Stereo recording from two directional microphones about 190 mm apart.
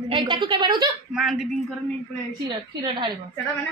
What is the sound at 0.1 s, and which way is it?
Speech, 25° right (ahead or behind).